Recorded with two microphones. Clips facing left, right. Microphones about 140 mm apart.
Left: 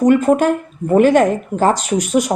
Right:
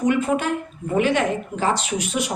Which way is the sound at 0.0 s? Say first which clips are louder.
Left 8 dB; 45° left (ahead or behind).